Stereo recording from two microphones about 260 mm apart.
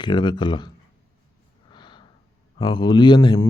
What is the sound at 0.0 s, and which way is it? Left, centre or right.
Speech, centre.